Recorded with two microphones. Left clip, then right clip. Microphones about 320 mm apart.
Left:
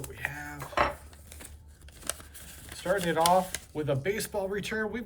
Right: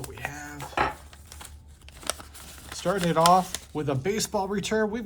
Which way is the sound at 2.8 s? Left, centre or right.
Right.